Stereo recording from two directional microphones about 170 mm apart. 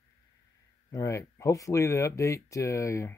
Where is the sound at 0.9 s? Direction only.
20° left (ahead or behind).